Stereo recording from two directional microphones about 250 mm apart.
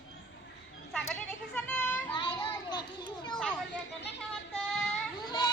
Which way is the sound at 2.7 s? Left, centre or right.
Centre.